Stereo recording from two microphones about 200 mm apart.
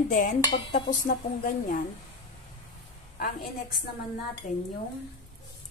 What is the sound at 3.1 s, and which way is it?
A woman's voice, 45° left (ahead or behind).